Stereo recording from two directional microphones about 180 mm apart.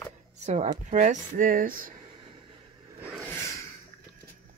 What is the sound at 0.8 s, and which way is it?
Speech, 45° right (ahead or behind).